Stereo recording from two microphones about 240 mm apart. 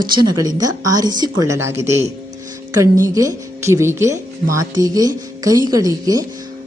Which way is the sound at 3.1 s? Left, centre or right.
Centre.